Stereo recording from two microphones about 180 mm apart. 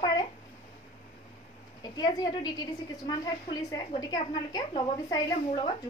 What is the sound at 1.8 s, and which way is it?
A woman's voice, 20° left (ahead or behind).